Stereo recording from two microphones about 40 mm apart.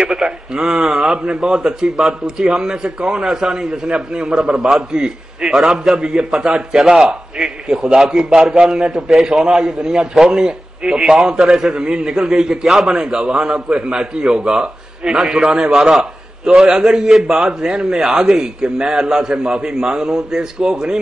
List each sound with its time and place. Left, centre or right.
0.1 s a man's voice: centre
2.0 s a man's voice: centre
2.5 s a man's voice: centre
5.9 s a man's voice: right
6.8 s a man's voice: centre
7.1 s a man's voice: centre
15.7 s a man's voice: centre
16.7 s a man's voice: centre